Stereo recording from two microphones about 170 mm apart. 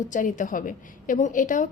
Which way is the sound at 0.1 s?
50° left (ahead or behind).